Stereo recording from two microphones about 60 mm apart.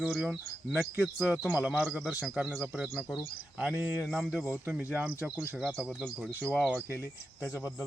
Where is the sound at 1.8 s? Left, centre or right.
Centre.